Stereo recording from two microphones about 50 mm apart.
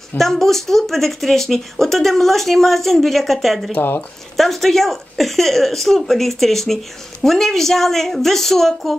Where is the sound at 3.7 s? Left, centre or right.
Left.